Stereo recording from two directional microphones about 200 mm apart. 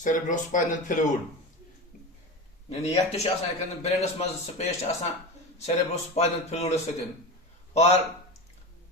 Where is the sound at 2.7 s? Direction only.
30° left (ahead or behind).